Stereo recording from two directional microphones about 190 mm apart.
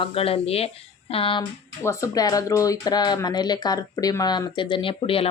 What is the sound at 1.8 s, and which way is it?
Speech, 15° left (ahead or behind).